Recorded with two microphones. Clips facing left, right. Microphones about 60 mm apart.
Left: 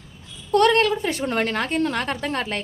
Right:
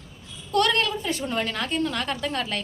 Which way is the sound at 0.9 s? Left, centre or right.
Left.